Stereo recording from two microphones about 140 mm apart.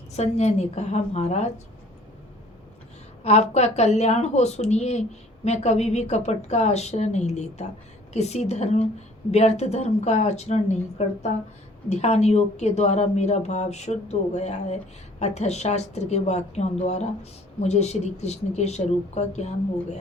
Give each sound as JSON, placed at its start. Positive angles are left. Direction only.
{"t": 0.1, "sound": "a woman's voice", "side_deg": 50}
{"t": 3.2, "sound": "a woman's voice", "side_deg": 50}